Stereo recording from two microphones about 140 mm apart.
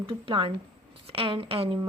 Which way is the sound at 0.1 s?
40° right (ahead or behind).